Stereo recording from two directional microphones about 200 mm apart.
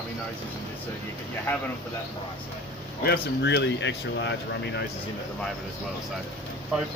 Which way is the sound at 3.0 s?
55° left (ahead or behind).